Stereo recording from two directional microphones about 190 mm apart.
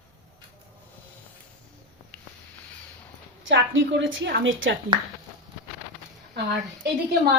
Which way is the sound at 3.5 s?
70° right (ahead or behind).